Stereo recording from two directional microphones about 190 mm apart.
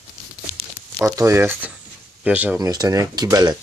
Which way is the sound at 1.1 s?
15° right (ahead or behind).